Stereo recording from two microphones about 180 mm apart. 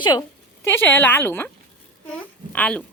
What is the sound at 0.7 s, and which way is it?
A woman's voice, 10° left (ahead or behind).